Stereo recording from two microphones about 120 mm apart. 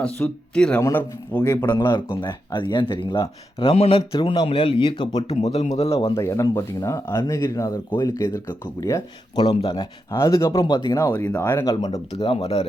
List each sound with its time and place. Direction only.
0.2 s speech: 15° left (ahead or behind)
0.8 s speech: 25° left (ahead or behind)
1.5 s speech: 35° left (ahead or behind)
5.3 s speech: 65° left (ahead or behind)
6.1 s speech: 25° left (ahead or behind)
9.6 s speech: 50° left (ahead or behind)
10.1 s speech: 25° left (ahead or behind)
10.6 s speech: 40° left (ahead or behind)
11.1 s speech: 15° left (ahead or behind)
11.6 s speech: 35° left (ahead or behind)
12.1 s speech: 55° left (ahead or behind)